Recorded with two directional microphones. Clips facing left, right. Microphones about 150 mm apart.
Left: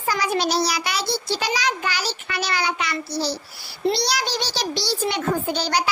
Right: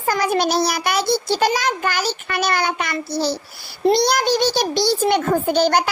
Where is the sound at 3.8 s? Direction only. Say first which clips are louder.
Right 7 dB; 50° right (ahead or behind).